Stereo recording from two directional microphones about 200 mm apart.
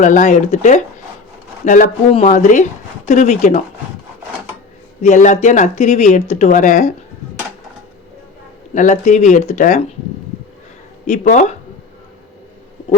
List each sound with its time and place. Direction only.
0.0 s speech: 40° left (ahead or behind)
5.0 s speech: 35° left (ahead or behind)
8.7 s speech: 40° left (ahead or behind)
11.0 s speech: 40° left (ahead or behind)